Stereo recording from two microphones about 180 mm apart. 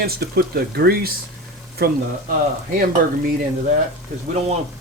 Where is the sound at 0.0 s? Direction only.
60° right (ahead or behind).